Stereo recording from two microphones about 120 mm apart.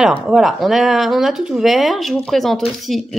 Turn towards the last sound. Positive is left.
turn(degrees=0)  # may be behind; listen again after turning